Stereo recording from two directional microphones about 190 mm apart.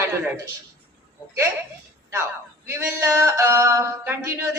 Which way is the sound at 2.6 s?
15° right (ahead or behind).